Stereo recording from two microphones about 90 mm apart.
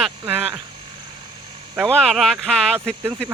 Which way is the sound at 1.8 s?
5° left (ahead or behind).